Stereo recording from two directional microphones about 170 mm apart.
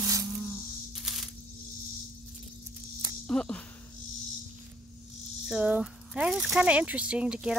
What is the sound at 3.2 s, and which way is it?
Speech, 5° left (ahead or behind).